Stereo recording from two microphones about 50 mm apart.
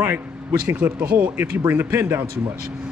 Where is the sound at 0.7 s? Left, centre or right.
Right.